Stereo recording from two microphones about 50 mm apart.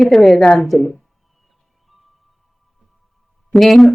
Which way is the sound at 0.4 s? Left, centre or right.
Centre.